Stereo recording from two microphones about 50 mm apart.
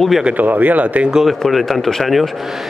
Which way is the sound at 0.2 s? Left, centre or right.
Right.